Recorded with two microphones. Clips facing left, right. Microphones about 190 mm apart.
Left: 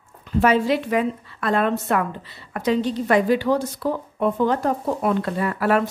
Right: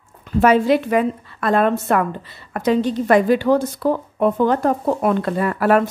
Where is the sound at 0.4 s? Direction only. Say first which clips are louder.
Right 4 dB; 50° right (ahead or behind).